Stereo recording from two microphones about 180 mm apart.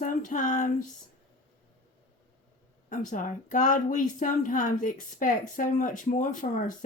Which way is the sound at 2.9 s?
45° left (ahead or behind).